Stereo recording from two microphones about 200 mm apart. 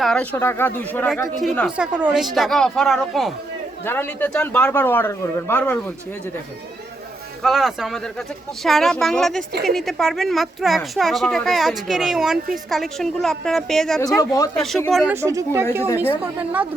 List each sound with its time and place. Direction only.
0.0 s a woman's voice: 5° left (ahead or behind)
7.4 s a woman's voice: centre (ahead or behind)
14.2 s a man's voice: 15° left (ahead or behind)
14.8 s a woman's voice: centre (ahead or behind)
15.1 s speech: 15° right (ahead or behind)